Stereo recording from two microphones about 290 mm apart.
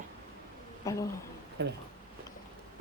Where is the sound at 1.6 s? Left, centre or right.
Right.